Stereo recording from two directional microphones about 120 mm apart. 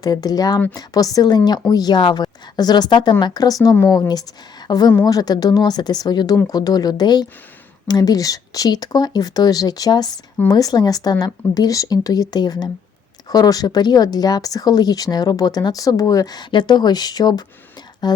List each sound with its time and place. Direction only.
0.0 s speech: 35° left (ahead or behind)